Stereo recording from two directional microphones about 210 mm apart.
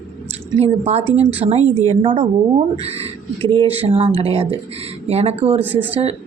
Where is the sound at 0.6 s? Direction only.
30° right (ahead or behind).